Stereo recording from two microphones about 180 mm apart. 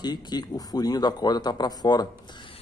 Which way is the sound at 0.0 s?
20° left (ahead or behind).